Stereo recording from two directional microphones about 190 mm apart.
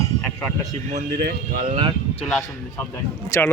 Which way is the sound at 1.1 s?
55° right (ahead or behind).